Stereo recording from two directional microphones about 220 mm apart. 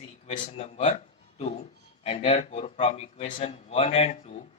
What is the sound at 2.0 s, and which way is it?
Speech, 25° left (ahead or behind).